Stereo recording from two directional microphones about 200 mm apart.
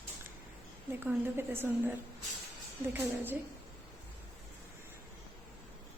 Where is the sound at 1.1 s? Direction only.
10° right (ahead or behind).